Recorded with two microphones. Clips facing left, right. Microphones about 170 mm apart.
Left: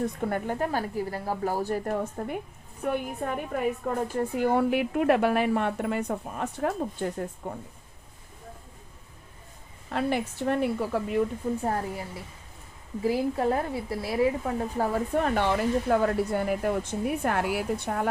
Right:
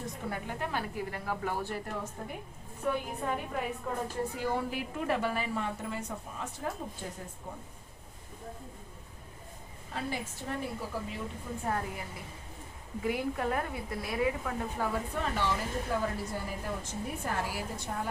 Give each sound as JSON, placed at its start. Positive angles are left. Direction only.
{"t": 0.3, "sound": "a woman's voice", "side_deg": 50}
{"t": 2.2, "sound": "a woman's voice", "side_deg": 55}
{"t": 9.9, "sound": "a woman's voice", "side_deg": 70}
{"t": 11.6, "sound": "a woman's voice", "side_deg": 35}